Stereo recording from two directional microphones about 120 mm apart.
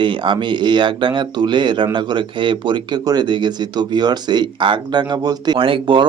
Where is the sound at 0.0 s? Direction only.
45° right (ahead or behind).